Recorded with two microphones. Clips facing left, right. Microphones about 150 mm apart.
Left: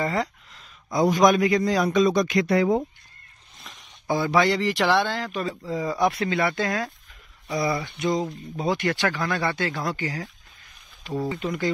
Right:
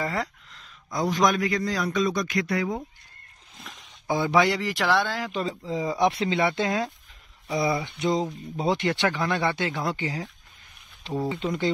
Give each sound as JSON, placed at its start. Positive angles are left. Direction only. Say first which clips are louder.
{"t": 0.0, "sound": "a sound", "louder": "left 3 dB", "side_deg": 0}
{"t": 0.9, "sound": "a man's voice", "louder": "left 5 dB", "side_deg": 15}
{"t": 4.1, "sound": "speech", "louder": "left 1 dB", "side_deg": -15}
{"t": 4.6, "sound": "speech", "louder": "left 3 dB", "side_deg": 0}
{"t": 5.3, "sound": "speech", "louder": "even", "side_deg": -20}
{"t": 7.4, "sound": "speech", "louder": "even", "side_deg": -5}
{"t": 7.7, "sound": "speech", "louder": "even", "side_deg": -20}